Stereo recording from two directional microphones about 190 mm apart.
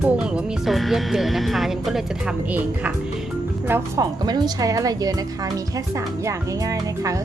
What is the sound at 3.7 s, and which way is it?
A woman's voice, 20° right (ahead or behind).